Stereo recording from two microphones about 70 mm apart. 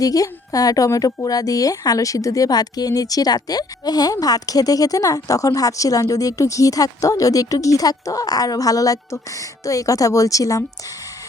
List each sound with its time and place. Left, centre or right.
0.0 s a woman's voice: left